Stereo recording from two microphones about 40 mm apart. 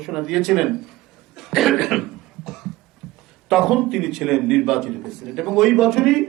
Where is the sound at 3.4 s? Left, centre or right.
Centre.